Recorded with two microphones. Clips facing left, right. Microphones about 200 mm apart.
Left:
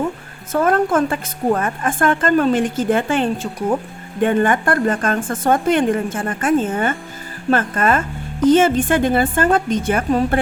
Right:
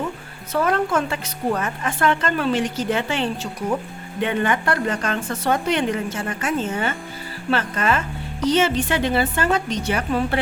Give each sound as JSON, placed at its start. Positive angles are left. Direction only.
{"t": 0.5, "sound": "a woman's voice", "side_deg": 50}